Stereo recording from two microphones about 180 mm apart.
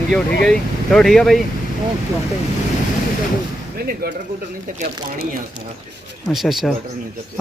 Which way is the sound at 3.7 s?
55° right (ahead or behind).